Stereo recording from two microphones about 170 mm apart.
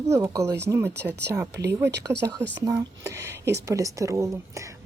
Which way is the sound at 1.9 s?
85° right.